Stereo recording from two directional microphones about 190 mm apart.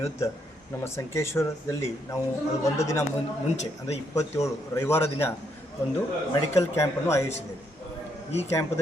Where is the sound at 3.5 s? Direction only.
35° left (ahead or behind).